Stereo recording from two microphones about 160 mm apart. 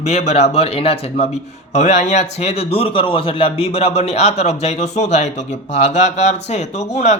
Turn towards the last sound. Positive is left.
turn(degrees=45)  # may be behind; listen again after turning